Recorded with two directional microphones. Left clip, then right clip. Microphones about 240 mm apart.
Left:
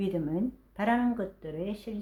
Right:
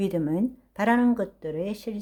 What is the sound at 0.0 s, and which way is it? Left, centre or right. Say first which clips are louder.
Speech: right 5 dB; right.